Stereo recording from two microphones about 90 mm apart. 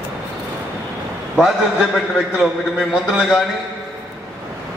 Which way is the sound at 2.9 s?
5° right (ahead or behind).